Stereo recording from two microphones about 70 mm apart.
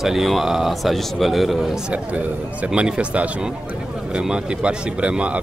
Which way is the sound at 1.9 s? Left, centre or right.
Centre.